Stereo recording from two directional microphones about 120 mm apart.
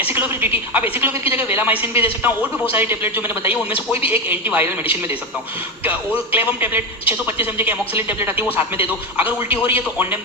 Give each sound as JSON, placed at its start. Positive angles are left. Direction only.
{"t": 0.1, "sound": "a man's voice", "side_deg": -20}